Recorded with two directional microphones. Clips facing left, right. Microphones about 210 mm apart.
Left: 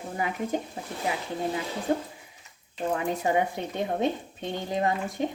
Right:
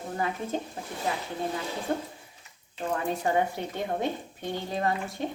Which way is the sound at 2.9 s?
15° left (ahead or behind).